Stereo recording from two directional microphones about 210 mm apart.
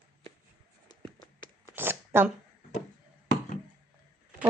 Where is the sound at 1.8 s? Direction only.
10° right (ahead or behind).